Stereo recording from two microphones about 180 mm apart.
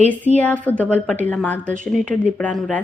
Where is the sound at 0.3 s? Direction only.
10° left (ahead or behind).